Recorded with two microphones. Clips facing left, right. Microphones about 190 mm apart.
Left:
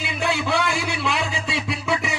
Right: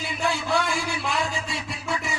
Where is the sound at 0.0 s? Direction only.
75° left (ahead or behind).